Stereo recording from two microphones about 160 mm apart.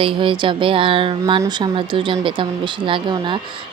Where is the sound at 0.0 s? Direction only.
30° right (ahead or behind).